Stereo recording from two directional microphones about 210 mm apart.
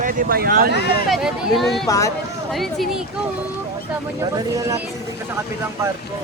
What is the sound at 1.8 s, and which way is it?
Speech, 15° left (ahead or behind).